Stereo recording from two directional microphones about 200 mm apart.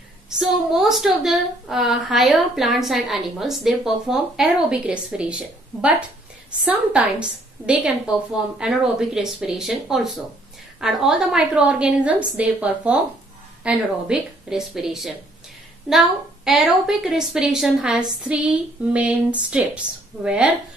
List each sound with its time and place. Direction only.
0.4 s a woman's voice: centre (ahead or behind)